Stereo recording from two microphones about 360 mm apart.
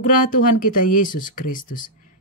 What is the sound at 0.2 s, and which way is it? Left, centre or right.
Speech, left.